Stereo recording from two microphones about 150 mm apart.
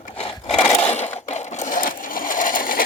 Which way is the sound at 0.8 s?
45° left (ahead or behind).